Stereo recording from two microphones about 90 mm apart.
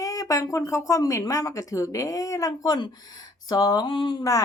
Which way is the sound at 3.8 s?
60° left (ahead or behind).